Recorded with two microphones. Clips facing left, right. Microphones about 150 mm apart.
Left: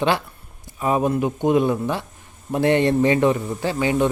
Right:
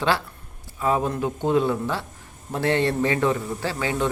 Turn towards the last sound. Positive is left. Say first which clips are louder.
# left 5 dB
turn(degrees=20)  # may be behind; listen again after turning